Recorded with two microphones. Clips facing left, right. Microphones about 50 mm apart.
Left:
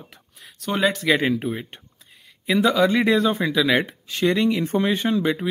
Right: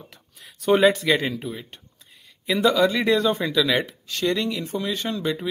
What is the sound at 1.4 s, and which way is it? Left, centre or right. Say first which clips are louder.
Speech: left 5 dB; left.